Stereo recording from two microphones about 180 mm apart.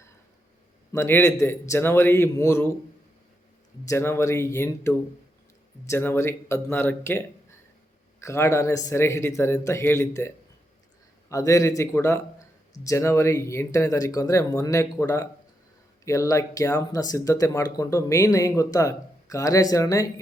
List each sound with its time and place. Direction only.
0.9 s speech: 15° left (ahead or behind)
3.8 s speech: 15° left (ahead or behind)